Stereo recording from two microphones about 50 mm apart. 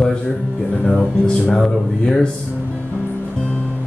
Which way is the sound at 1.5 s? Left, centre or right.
Centre.